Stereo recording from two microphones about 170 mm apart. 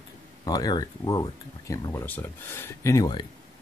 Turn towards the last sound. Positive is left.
turn(degrees=25)  # may be behind; listen again after turning